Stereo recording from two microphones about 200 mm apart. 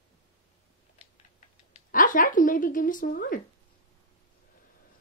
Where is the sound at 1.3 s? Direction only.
40° left (ahead or behind).